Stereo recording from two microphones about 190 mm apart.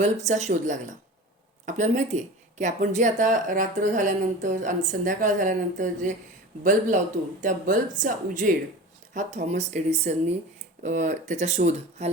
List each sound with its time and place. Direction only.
0.3 s speech: 40° right (ahead or behind)